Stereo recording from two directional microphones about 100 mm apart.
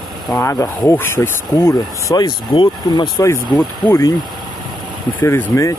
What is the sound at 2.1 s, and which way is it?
Speech, 50° left (ahead or behind).